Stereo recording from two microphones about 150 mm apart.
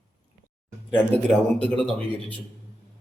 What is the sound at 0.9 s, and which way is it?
Speech, 5° left (ahead or behind).